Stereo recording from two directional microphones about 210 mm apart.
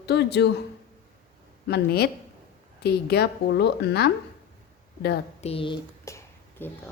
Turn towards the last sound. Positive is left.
turn(degrees=10)  # may be behind; listen again after turning